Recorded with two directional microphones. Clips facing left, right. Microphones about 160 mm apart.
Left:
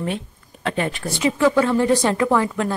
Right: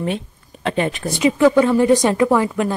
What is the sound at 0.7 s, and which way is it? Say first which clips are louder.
Speech: right 3 dB; 20° right (ahead or behind).